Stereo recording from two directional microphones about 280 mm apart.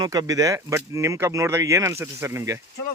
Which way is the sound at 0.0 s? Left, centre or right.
Centre.